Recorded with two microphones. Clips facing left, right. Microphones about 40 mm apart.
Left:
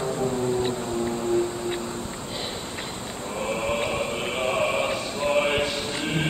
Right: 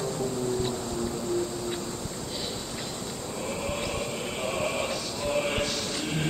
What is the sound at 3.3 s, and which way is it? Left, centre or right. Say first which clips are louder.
Chant: left 7 dB; left.